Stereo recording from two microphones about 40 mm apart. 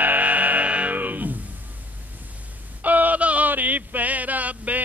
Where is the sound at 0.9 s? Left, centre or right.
Right.